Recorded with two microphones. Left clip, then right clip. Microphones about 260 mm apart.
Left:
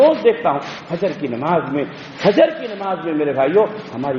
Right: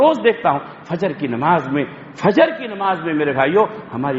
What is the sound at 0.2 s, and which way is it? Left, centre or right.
A man's voice, right.